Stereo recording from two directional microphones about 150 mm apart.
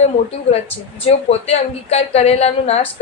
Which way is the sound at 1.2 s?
45° left (ahead or behind).